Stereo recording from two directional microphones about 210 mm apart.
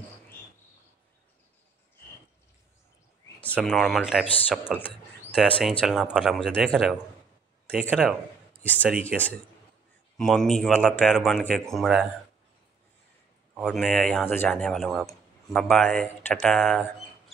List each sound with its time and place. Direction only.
3.5 s speech: centre (ahead or behind)
9.1 s speech: 5° right (ahead or behind)
13.6 s speech: centre (ahead or behind)